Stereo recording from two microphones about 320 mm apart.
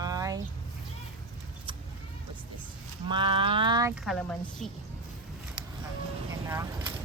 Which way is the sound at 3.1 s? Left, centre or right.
Centre.